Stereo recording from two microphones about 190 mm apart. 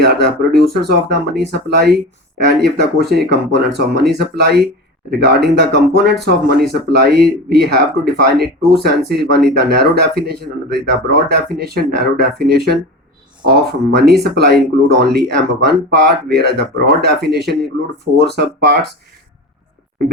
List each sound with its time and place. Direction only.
0.0 s speech: 60° right (ahead or behind)
13.9 s speech: 60° right (ahead or behind)